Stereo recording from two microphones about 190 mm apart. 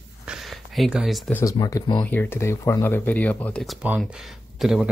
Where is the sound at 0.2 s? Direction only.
5° right (ahead or behind).